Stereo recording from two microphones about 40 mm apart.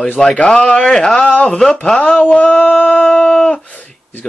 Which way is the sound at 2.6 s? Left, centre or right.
Left.